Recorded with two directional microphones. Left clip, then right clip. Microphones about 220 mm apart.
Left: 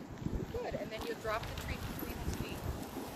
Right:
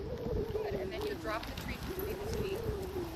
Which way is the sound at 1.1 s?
Centre (ahead or behind).